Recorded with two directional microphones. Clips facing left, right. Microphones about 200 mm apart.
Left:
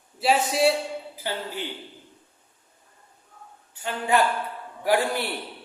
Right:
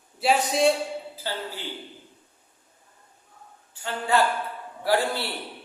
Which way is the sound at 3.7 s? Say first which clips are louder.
Left 1 dB; 15° left (ahead or behind).